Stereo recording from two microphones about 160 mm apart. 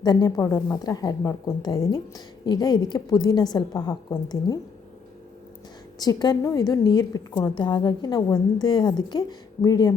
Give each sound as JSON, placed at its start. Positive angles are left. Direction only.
{"t": 0.0, "sound": "a woman's voice", "side_deg": 25}
{"t": 6.0, "sound": "a woman's voice", "side_deg": 25}